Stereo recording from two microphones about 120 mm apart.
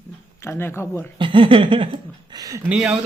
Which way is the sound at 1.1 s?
45° right (ahead or behind).